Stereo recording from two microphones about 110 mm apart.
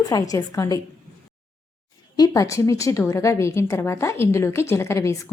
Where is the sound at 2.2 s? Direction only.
30° left (ahead or behind).